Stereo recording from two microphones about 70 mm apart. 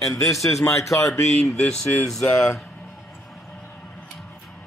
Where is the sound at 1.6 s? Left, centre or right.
Centre.